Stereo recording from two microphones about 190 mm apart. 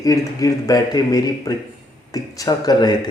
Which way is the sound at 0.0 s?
20° left (ahead or behind).